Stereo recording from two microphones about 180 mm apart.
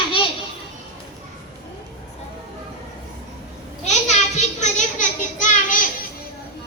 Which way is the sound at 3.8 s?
40° left (ahead or behind).